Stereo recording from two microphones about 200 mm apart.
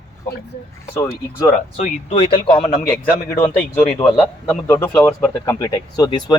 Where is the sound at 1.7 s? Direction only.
35° left (ahead or behind).